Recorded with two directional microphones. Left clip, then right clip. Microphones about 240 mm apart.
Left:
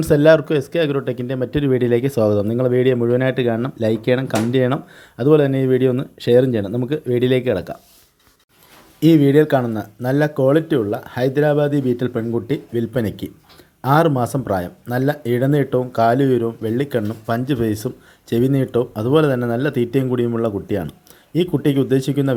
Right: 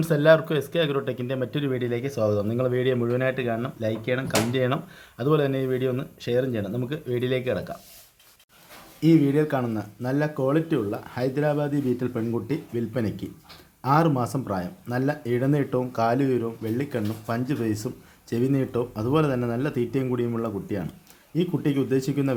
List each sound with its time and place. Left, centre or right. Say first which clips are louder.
0.0 s speech: left 6 dB; left
9.0 s speech: left 7 dB; left